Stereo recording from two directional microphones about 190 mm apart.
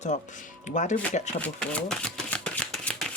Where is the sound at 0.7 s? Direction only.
40° left (ahead or behind).